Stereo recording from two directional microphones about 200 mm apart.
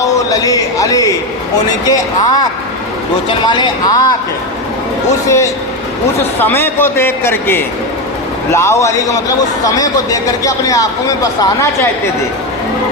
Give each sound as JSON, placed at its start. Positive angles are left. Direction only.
{"t": 0.3, "sound": "speech", "side_deg": 15}
{"t": 6.4, "sound": "speech", "side_deg": 10}